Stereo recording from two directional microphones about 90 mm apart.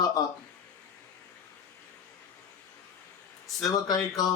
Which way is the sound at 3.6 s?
45° left (ahead or behind).